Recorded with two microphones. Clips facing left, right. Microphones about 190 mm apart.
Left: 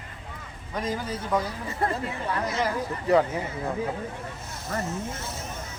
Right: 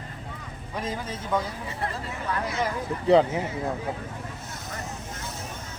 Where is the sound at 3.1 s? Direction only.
25° right (ahead or behind).